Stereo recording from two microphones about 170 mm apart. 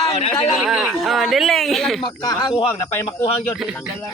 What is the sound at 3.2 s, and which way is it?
Speech, 35° left (ahead or behind).